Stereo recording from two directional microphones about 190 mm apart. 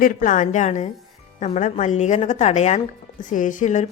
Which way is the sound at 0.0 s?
45° left (ahead or behind).